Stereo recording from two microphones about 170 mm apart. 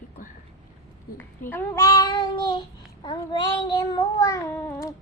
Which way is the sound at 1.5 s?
15° left (ahead or behind).